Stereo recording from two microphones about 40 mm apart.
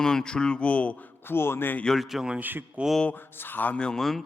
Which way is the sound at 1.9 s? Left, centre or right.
Centre.